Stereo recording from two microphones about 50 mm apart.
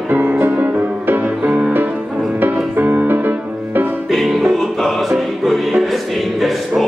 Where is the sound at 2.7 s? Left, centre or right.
Right.